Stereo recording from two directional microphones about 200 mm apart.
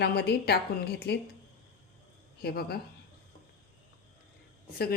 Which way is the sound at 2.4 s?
50° left (ahead or behind).